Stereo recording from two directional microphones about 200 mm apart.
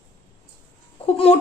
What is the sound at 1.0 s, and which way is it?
Chicken, 30° left (ahead or behind).